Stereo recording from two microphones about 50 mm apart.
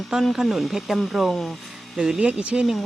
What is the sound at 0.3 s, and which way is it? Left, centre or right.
Speech, centre.